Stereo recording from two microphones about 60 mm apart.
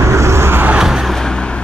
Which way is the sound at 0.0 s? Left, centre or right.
Right.